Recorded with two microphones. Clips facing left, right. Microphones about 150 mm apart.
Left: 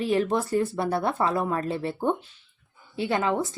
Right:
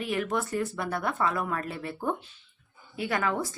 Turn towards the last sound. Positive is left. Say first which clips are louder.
# left 4 dB
turn(degrees=20)  # may be behind; listen again after turning